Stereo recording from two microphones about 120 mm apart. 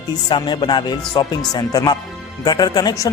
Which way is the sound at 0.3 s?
40° left (ahead or behind).